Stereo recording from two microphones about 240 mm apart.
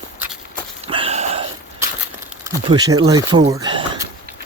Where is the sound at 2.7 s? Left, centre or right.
Centre.